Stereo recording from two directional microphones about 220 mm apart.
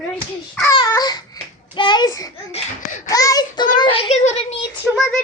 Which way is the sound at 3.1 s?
15° left (ahead or behind).